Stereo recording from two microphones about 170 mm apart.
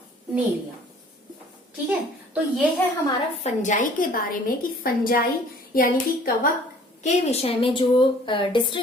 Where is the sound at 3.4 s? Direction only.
45° left (ahead or behind).